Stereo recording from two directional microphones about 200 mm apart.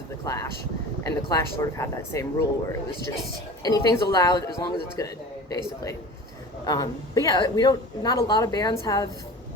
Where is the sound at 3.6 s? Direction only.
20° left (ahead or behind).